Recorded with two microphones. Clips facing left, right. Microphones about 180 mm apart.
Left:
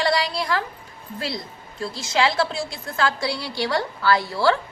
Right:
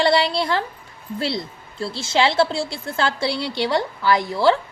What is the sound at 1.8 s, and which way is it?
A woman's voice, 30° right (ahead or behind).